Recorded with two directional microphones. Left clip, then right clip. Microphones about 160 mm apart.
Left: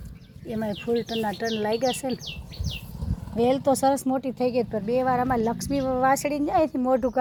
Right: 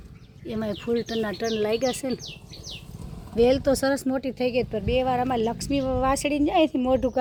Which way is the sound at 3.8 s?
70° right (ahead or behind).